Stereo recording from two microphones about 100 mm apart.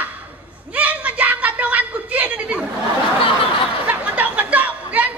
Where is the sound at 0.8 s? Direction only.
15° right (ahead or behind).